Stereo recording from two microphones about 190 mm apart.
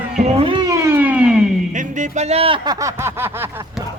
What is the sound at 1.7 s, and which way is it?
Speech, 40° right (ahead or behind).